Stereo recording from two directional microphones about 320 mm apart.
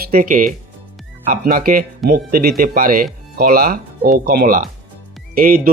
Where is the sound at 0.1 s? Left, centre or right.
Right.